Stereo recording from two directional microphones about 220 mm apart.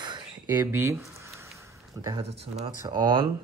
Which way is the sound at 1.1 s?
10° right (ahead or behind).